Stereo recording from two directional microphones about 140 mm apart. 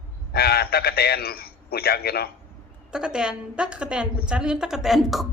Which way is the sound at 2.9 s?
5° right (ahead or behind).